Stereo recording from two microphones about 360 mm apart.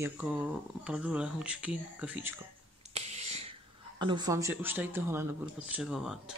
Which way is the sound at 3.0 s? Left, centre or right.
Centre.